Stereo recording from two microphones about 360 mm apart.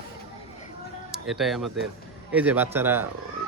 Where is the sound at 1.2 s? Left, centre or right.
Centre.